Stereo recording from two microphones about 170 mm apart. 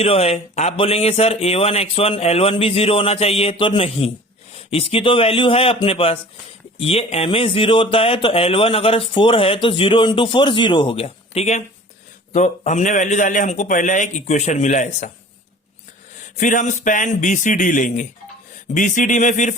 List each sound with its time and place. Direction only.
0.0 s a man's voice: 35° left (ahead or behind)
16.4 s a man's voice: 50° left (ahead or behind)